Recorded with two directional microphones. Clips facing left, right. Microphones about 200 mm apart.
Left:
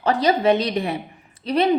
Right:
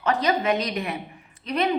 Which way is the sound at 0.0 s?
35° left (ahead or behind).